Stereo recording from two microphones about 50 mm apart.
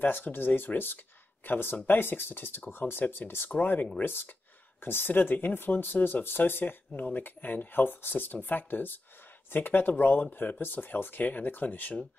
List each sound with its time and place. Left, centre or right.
0.0 s speech: left
6.2 s speech: left
6.9 s speech: left